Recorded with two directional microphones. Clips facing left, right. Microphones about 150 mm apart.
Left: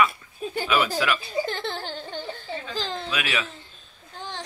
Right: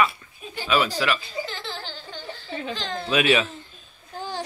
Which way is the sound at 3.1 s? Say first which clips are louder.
Right 12 dB; 25° right (ahead or behind).